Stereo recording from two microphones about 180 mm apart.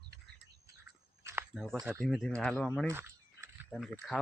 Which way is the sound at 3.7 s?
Centre (ahead or behind).